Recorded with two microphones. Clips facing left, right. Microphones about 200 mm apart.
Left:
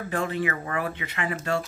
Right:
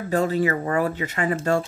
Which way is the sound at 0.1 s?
40° right (ahead or behind).